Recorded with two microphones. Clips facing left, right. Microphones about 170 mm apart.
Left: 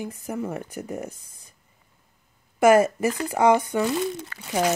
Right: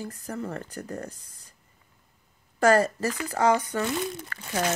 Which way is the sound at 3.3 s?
15° left (ahead or behind).